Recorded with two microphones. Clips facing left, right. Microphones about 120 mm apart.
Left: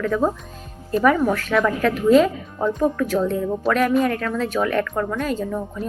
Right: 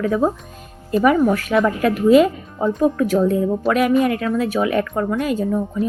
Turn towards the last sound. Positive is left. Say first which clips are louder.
# right 5 dB
turn(degrees=-10)  # may be behind; listen again after turning